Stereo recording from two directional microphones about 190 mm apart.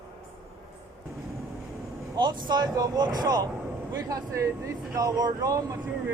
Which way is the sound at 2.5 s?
20° right (ahead or behind).